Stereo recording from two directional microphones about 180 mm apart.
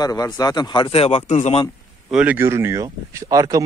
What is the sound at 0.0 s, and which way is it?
Speech, 20° left (ahead or behind).